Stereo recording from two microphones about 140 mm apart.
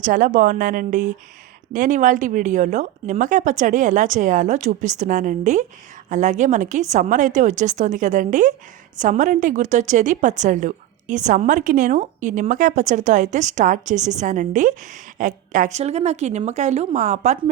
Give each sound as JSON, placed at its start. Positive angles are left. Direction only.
{"t": 0.0, "sound": "a woman's voice", "side_deg": -70}
{"t": 15.8, "sound": "a woman's voice", "side_deg": -50}